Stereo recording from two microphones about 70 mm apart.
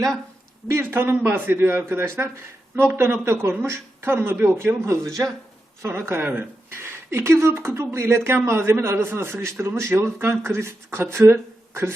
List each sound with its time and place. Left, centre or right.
0.7 s a man's voice: right
4.9 s speech: right
5.8 s a man's voice: right